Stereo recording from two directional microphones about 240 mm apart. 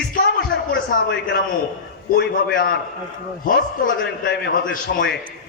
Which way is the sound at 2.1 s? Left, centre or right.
Left.